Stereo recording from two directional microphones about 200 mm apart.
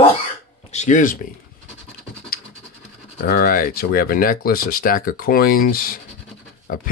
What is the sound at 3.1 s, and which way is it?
Speech, 50° left (ahead or behind).